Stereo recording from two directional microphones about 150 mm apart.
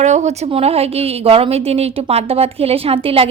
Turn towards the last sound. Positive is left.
turn(degrees=-40)  # may be behind; listen again after turning